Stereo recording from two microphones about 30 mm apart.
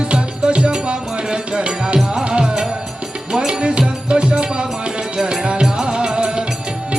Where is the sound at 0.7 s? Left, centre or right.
Right.